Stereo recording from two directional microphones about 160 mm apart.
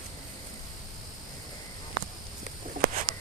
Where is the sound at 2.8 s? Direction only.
90° right.